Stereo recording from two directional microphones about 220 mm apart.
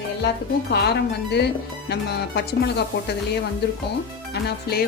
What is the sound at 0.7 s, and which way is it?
Speech, 50° left (ahead or behind).